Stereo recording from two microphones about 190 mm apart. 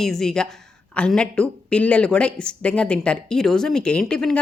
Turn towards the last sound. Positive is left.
turn(degrees=0)  # may be behind; listen again after turning